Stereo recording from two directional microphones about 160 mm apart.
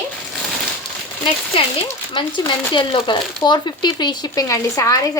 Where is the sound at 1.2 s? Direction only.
30° left (ahead or behind).